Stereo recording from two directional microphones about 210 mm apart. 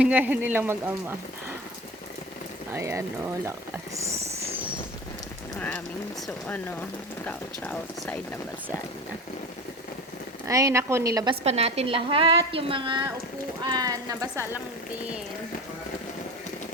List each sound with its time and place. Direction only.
0.0 s speech: 5° right (ahead or behind)
2.7 s speech: 15° right (ahead or behind)
5.5 s speech: 5° left (ahead or behind)
10.4 s speech: 15° right (ahead or behind)
11.4 s a woman's voice: 30° right (ahead or behind)